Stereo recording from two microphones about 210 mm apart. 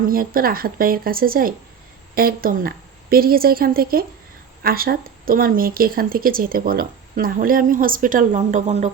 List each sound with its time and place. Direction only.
0.1 s speech: 45° right (ahead or behind)